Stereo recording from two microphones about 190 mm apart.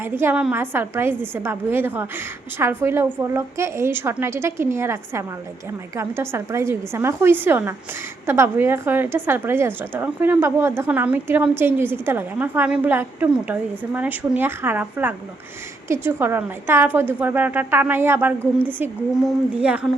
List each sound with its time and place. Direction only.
0.0 s a woman's voice: 10° right (ahead or behind)